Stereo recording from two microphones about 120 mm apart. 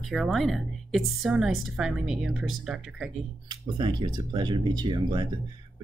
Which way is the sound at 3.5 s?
40° right (ahead or behind).